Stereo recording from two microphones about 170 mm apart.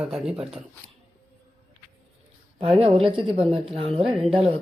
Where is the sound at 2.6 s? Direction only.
35° right (ahead or behind).